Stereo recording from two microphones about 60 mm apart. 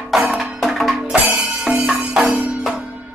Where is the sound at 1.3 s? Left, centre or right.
Centre.